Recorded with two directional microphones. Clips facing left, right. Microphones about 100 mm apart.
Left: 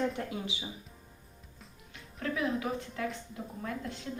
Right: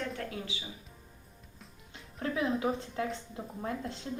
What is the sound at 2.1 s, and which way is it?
A woman's voice, 30° right (ahead or behind).